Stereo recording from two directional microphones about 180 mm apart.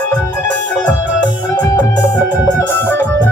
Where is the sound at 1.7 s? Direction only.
20° left (ahead or behind).